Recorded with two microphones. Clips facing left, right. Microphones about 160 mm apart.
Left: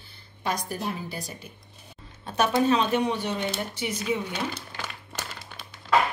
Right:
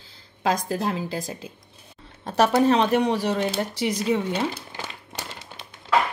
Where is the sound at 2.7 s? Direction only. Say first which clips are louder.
Right 4 dB; 70° right (ahead or behind).